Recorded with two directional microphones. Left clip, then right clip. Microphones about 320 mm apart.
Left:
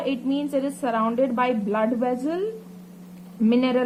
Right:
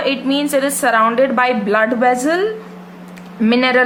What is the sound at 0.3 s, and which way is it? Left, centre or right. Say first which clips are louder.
A woman's voice: right 9 dB; centre.